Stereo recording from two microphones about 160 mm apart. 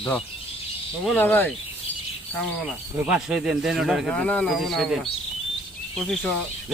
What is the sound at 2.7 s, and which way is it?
Speech, 5° right (ahead or behind).